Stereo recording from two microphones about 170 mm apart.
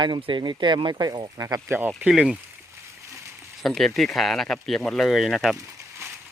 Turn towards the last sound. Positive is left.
turn(degrees=-15)  # may be behind; listen again after turning